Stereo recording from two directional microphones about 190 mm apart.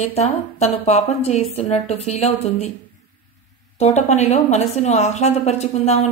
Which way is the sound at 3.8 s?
35° left (ahead or behind).